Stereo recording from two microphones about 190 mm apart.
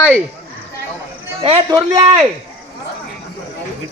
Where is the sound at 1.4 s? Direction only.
25° right (ahead or behind).